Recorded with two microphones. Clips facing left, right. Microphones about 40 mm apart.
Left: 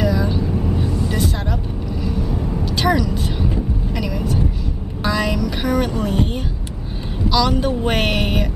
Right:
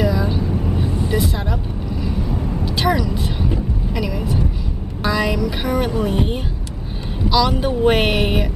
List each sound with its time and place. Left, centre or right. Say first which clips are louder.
0.0 s vehicle: even; centre
0.8 s vehicle: even; right
1.1 s vehicle: right 1 dB; centre
5.0 s music: right 1 dB; centre
7.2 s speech: even; centre